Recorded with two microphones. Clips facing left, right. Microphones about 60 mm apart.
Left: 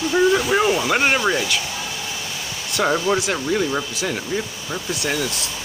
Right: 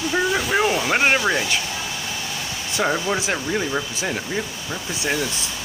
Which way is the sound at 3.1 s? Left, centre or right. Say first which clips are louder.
Left 2 dB; centre.